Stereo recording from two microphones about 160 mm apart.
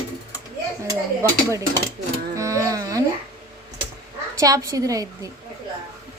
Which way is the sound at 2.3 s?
20° right (ahead or behind).